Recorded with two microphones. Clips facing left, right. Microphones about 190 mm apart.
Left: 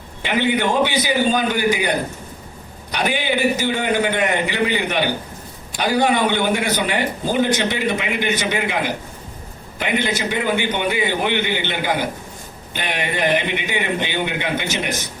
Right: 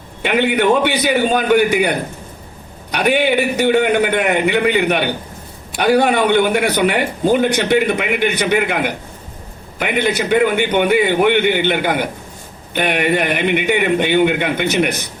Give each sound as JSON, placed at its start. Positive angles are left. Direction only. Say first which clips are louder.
{"t": 0.3, "sound": "a man's voice", "louder": "right 5 dB", "side_deg": -60}
{"t": 2.9, "sound": "a man's voice", "louder": "right 6 dB", "side_deg": -60}